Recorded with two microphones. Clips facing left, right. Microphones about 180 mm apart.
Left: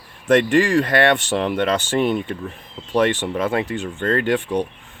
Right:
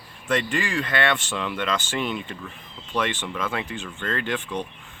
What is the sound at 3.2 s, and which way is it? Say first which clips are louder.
Speech: left 8 dB; 40° left (ahead or behind).